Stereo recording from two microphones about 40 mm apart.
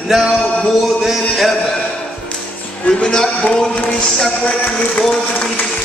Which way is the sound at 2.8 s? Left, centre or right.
Centre.